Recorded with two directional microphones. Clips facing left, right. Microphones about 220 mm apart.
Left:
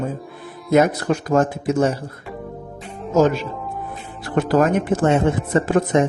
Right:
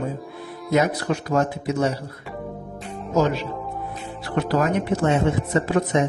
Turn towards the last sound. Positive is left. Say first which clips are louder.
# left 3 dB
turn(degrees=50)  # may be behind; listen again after turning